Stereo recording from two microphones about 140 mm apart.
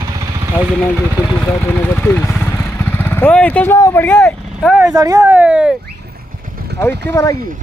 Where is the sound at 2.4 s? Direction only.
15° left (ahead or behind).